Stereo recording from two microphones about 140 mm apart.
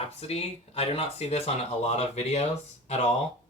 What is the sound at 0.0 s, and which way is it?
Speech, 45° left (ahead or behind).